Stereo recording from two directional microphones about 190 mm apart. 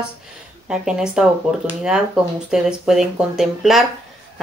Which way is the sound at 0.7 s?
5° right (ahead or behind).